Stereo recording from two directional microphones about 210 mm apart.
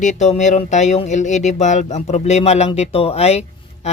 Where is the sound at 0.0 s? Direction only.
35° left (ahead or behind).